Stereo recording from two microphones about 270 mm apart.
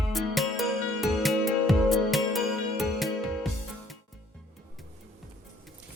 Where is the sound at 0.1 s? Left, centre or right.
Centre.